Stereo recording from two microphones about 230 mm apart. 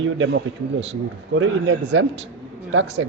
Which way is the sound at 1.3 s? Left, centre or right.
Right.